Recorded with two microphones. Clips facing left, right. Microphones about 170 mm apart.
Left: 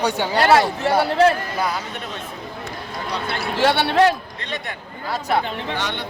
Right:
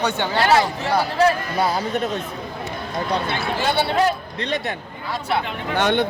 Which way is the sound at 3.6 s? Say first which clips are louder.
Left 4 dB; 75° left (ahead or behind).